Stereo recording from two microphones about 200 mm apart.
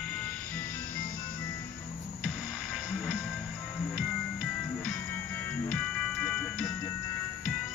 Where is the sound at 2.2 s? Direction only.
5° right (ahead or behind).